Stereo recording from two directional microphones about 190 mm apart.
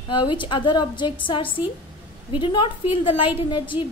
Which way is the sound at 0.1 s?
25° left (ahead or behind).